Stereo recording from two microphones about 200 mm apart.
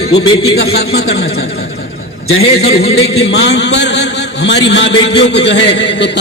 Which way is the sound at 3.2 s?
60° left (ahead or behind).